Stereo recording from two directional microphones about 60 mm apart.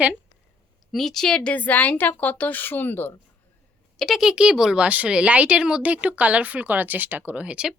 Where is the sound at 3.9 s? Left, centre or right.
Centre.